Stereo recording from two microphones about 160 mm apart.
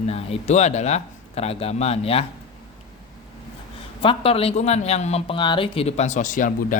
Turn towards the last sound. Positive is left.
turn(degrees=55)  # may be behind; listen again after turning